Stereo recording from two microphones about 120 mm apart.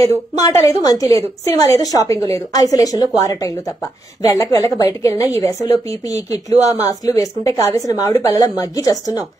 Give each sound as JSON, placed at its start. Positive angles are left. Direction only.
{"t": 0.0, "sound": "a woman's voice", "side_deg": 25}